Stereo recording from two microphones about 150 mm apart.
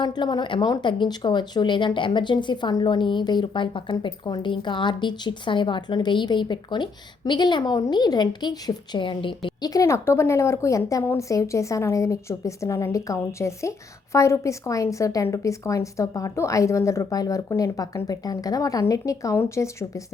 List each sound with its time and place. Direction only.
0.0 s speech: 30° left (ahead or behind)